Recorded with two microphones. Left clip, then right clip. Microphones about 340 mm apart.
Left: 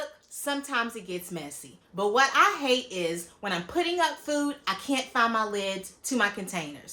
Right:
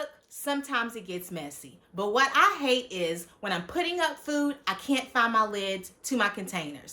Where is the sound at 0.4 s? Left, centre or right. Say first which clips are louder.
Even; centre.